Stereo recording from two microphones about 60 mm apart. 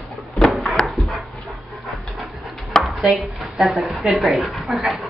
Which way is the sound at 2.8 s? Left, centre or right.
Centre.